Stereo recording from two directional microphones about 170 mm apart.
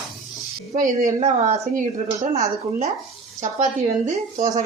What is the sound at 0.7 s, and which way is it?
Speech, 50° right (ahead or behind).